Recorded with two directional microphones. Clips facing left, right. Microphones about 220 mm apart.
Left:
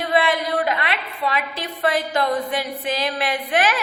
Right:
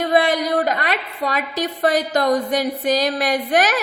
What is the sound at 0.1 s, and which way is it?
A woman's voice, 45° right (ahead or behind).